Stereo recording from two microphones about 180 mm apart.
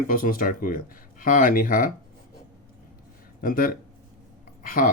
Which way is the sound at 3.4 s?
50° left (ahead or behind).